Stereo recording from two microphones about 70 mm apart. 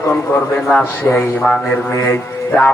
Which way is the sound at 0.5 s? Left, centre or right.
Centre.